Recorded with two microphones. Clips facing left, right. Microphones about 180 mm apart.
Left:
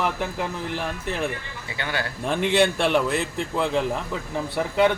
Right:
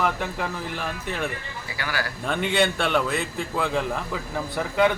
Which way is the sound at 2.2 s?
Centre (ahead or behind).